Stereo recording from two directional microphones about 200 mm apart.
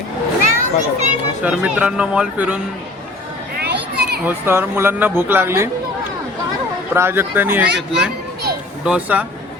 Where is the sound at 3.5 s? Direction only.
55° right (ahead or behind).